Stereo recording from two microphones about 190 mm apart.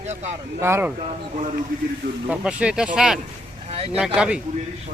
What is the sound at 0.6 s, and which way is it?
Speech, 15° right (ahead or behind).